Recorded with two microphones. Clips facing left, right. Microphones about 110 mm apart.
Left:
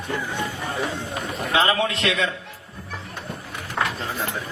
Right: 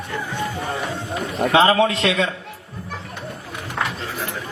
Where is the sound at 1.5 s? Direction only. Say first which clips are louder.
Right 5 dB; 30° right (ahead or behind).